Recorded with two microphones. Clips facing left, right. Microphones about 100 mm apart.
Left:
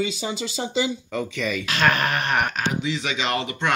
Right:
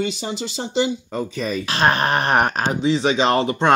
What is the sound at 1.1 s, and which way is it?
Speech, 35° right (ahead or behind).